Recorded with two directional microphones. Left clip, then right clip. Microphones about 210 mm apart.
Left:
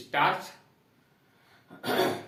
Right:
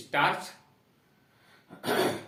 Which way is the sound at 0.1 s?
20° right (ahead or behind).